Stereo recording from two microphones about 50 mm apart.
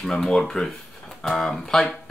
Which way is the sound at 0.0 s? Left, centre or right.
Centre.